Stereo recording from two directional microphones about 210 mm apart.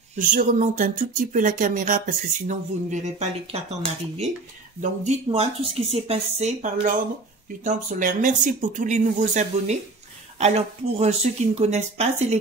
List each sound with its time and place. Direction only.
0.1 s speech: 40° right (ahead or behind)
5.0 s speech: 30° right (ahead or behind)